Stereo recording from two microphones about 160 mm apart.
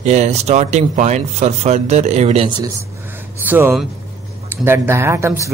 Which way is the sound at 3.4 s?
10° right (ahead or behind).